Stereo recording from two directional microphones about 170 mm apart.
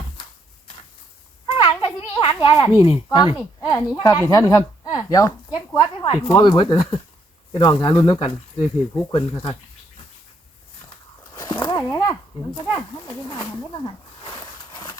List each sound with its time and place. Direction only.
1.5 s children playing: 30° left (ahead or behind)
2.7 s a woman's voice: 30° left (ahead or behind)
11.4 s a sound: 25° left (ahead or behind)